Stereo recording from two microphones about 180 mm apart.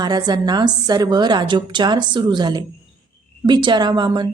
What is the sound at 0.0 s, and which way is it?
A woman's voice, 25° right (ahead or behind).